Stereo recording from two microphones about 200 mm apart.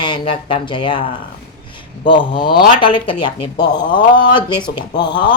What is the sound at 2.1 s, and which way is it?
Speech, 25° left (ahead or behind).